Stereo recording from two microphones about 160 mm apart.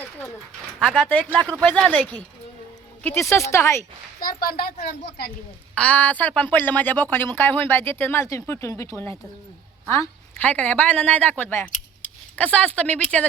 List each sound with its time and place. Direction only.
0.8 s speech: centre (ahead or behind)
4.2 s a woman's voice: 65° left (ahead or behind)
5.0 s speech: 90° left
5.7 s speech: 10° left (ahead or behind)